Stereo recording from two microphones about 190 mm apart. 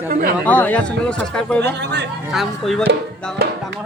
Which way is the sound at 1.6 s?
60° right (ahead or behind).